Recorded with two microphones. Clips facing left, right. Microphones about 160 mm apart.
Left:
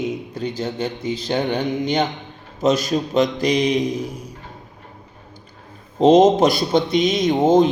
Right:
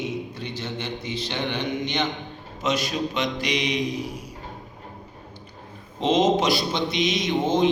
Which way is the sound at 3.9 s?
45° left (ahead or behind).